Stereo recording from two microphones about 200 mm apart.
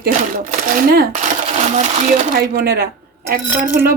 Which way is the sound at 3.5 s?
10° right (ahead or behind).